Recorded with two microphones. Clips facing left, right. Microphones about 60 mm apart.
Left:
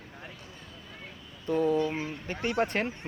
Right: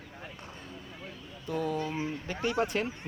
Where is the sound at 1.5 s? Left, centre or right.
Left.